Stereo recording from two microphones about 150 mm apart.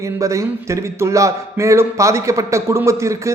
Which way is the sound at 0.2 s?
20° right (ahead or behind).